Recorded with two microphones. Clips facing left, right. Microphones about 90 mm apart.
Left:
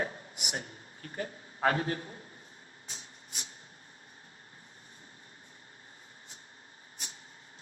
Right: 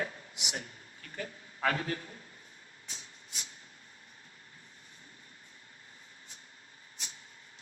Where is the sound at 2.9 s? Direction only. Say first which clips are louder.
Left 1 dB; 35° left (ahead or behind).